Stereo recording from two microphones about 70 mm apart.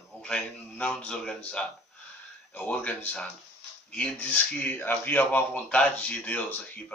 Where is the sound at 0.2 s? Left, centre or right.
Centre.